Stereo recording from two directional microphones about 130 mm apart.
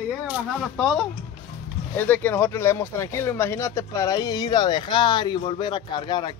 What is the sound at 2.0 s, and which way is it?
Speech, 15° left (ahead or behind).